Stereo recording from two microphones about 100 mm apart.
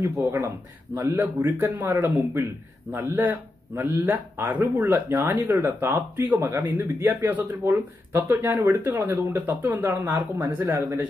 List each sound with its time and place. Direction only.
0.0 s speech: 20° right (ahead or behind)